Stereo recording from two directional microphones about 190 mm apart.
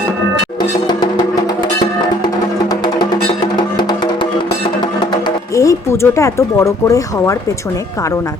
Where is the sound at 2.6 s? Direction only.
20° left (ahead or behind).